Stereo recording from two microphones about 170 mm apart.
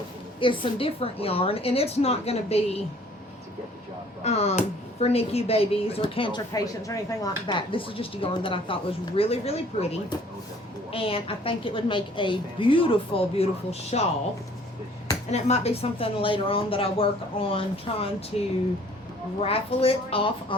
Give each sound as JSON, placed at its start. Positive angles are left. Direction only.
{"t": 0.3, "sound": "speech", "side_deg": 30}
{"t": 4.2, "sound": "speech", "side_deg": 40}
{"t": 10.9, "sound": "speech", "side_deg": 35}
{"t": 15.3, "sound": "speech", "side_deg": 40}